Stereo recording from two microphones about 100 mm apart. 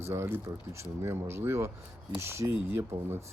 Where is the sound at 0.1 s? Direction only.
25° right (ahead or behind).